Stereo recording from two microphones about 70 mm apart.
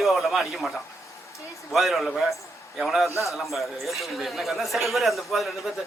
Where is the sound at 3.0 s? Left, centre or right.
Left.